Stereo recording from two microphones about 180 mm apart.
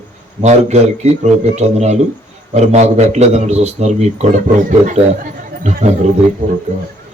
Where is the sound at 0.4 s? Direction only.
40° right (ahead or behind).